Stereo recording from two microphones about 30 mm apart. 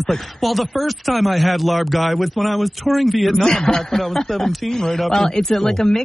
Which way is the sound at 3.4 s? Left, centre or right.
Centre.